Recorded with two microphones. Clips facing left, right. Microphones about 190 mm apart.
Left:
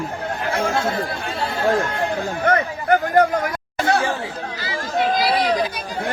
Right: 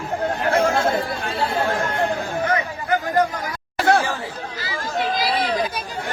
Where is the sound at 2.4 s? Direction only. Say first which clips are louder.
Left 3 dB; 60° left (ahead or behind).